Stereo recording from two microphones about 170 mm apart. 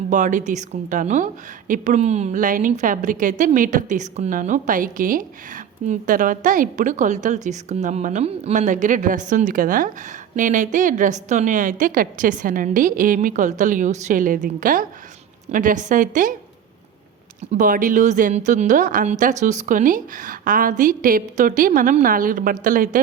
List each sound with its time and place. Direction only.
0.1 s a woman's voice: 45° right (ahead or behind)
17.5 s a woman's voice: 50° right (ahead or behind)